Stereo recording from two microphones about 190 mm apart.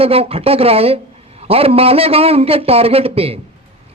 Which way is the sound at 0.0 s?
30° right (ahead or behind).